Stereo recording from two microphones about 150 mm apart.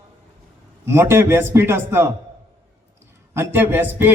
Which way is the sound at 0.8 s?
15° right (ahead or behind).